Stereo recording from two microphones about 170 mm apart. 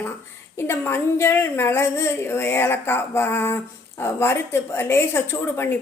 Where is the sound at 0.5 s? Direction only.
15° left (ahead or behind).